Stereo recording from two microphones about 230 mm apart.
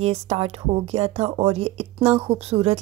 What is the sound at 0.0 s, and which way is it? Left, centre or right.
A woman's voice, right.